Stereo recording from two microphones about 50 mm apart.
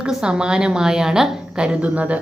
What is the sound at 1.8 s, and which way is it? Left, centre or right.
Speech, right.